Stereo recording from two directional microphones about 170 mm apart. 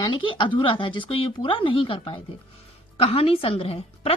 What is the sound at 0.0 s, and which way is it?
A woman's voice, 30° left (ahead or behind).